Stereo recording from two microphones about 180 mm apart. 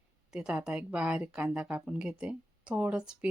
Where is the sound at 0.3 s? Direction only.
5° right (ahead or behind).